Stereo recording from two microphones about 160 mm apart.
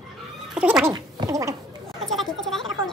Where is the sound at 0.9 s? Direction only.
25° right (ahead or behind).